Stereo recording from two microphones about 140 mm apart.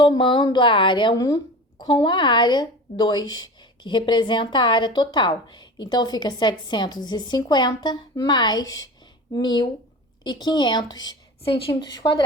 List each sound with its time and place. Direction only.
0.0 s speech: 35° left (ahead or behind)